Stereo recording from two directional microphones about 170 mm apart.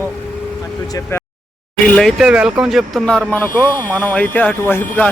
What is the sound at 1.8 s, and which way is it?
Speech, centre (ahead or behind).